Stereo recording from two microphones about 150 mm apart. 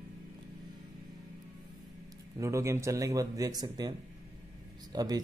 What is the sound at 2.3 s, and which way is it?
A man's voice, 20° right (ahead or behind).